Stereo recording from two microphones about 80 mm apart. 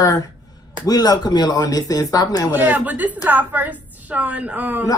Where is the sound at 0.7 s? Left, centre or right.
Left.